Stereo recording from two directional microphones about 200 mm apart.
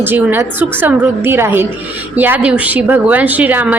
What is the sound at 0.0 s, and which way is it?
A woman's voice, 10° right (ahead or behind).